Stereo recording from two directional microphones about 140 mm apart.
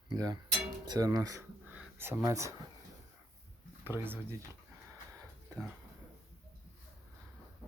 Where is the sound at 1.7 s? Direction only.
15° right (ahead or behind).